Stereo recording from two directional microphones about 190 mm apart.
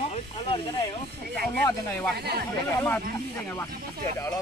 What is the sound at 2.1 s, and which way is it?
Speech, 55° right (ahead or behind).